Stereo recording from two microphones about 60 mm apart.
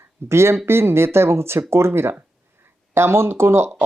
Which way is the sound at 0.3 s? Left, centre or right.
Right.